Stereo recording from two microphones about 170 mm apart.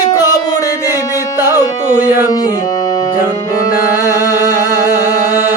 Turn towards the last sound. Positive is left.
turn(degrees=-15)  # may be behind; listen again after turning